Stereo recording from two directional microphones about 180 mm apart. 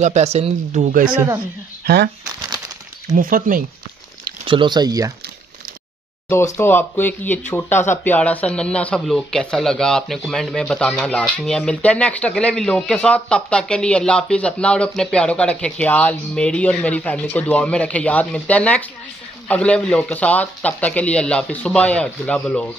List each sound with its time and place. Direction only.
0.0 s speech: 40° right (ahead or behind)
3.2 s speech: 50° right (ahead or behind)
4.5 s speech: 25° right (ahead or behind)
6.2 s speech: 15° left (ahead or behind)